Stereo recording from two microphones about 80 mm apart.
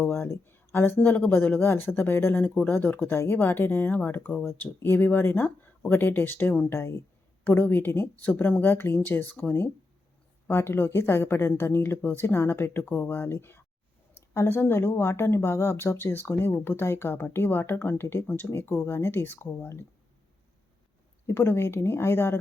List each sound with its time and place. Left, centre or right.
0.1 s speech: left
21.2 s speech: left